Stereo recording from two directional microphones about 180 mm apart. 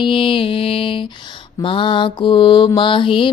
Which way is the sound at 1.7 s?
30° left (ahead or behind).